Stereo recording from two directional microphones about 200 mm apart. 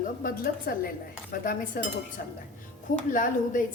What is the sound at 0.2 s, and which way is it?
A woman's voice, 45° left (ahead or behind).